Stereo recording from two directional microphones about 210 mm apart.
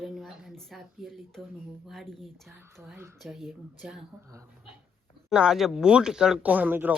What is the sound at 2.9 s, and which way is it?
Speech, 5° right (ahead or behind).